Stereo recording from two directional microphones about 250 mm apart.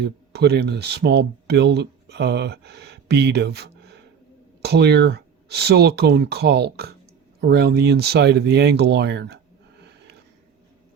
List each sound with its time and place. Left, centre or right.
0.0 s speech: right